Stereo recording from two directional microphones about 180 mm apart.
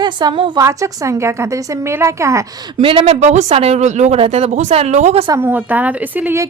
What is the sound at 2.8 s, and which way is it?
A woman's voice, 30° right (ahead or behind).